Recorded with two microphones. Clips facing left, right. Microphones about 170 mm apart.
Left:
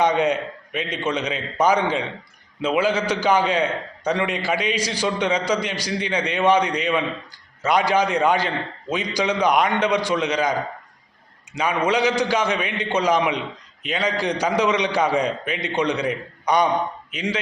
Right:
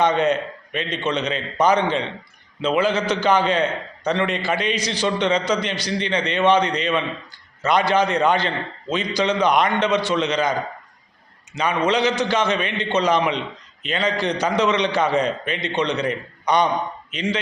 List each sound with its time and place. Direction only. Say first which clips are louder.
0.0 s a man's voice: right 1 dB; 10° left (ahead or behind)
11.5 s a man's voice: right 1 dB; 10° left (ahead or behind)